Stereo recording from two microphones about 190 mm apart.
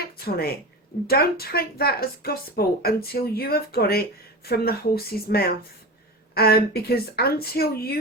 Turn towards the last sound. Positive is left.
turn(degrees=55)  # may be behind; listen again after turning